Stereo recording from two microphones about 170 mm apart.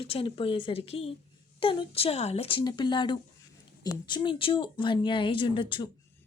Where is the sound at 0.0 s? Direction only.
35° left (ahead or behind).